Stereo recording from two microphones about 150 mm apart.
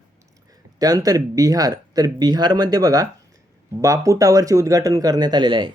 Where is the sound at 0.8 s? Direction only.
25° right (ahead or behind).